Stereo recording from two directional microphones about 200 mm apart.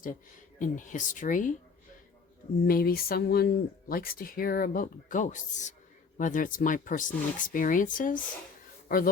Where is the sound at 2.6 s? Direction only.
45° left (ahead or behind).